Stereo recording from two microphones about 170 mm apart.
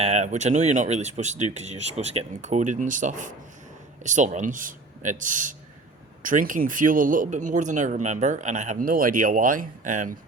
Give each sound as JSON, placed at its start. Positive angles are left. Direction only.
{"t": 0.0, "sound": "speech", "side_deg": -40}